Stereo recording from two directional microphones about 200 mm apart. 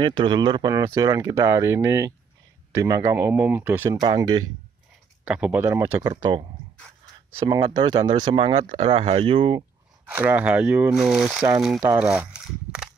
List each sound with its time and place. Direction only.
0.0 s speech: 25° right (ahead or behind)
5.2 s speech: 5° right (ahead or behind)
7.4 s speech: 20° right (ahead or behind)
10.0 s speech: 10° right (ahead or behind)